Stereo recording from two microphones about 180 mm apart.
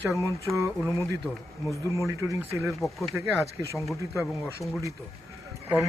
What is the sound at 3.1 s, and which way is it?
Speech, 15° right (ahead or behind).